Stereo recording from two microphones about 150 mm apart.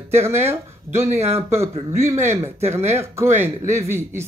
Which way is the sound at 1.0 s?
45° right (ahead or behind).